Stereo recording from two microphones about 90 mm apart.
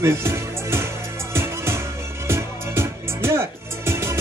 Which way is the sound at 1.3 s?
30° right (ahead or behind).